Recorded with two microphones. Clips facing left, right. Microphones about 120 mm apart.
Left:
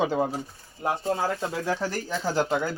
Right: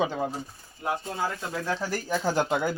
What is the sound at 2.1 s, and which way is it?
Speech, 15° right (ahead or behind).